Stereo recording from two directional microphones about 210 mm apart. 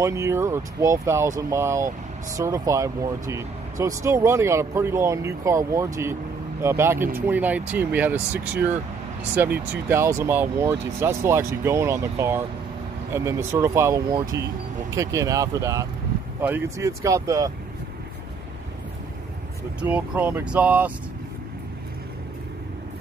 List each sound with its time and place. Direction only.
0.0 s speech: 15° right (ahead or behind)
19.8 s speech: 5° right (ahead or behind)